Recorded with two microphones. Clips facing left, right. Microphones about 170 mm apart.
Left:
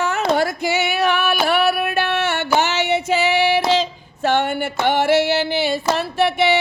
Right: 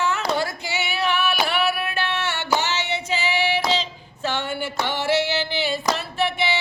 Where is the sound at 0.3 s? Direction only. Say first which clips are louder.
Left 7 dB; 45° left (ahead or behind).